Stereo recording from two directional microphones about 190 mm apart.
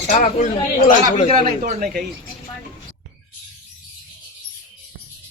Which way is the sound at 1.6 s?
50° right (ahead or behind).